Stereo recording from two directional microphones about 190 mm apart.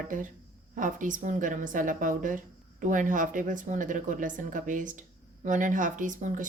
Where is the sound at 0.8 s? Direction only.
45° right (ahead or behind).